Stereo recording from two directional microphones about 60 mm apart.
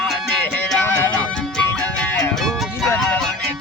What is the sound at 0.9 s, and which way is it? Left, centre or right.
Music, left.